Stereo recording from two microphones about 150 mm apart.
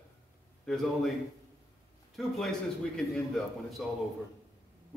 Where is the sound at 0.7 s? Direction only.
Centre (ahead or behind).